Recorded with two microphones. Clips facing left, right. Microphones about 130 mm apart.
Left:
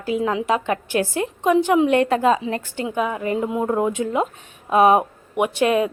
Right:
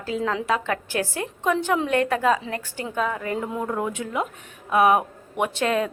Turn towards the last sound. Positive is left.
turn(degrees=15)  # may be behind; listen again after turning